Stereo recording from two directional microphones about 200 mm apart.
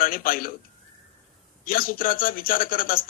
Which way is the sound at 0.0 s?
45° left (ahead or behind).